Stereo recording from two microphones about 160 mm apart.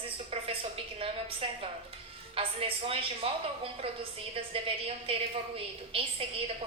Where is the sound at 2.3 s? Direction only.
35° right (ahead or behind).